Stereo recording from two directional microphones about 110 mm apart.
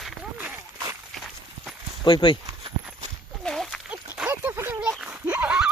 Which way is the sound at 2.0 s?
45° left (ahead or behind).